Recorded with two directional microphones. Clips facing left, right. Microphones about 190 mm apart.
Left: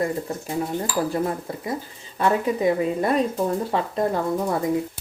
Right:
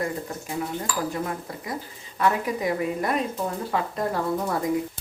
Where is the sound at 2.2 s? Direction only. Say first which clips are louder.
Left 4 dB; 25° left (ahead or behind).